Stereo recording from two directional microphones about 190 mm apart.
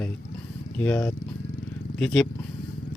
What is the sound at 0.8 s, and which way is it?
Speech, 10° left (ahead or behind).